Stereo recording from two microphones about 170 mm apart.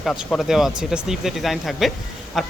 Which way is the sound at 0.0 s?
5° left (ahead or behind).